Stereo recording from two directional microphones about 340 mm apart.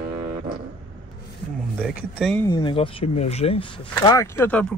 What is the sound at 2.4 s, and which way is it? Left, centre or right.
Speech, centre.